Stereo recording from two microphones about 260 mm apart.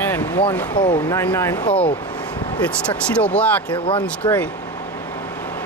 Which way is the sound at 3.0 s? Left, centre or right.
Centre.